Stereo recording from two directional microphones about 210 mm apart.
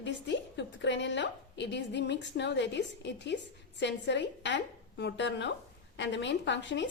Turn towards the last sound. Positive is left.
turn(degrees=60)  # may be behind; listen again after turning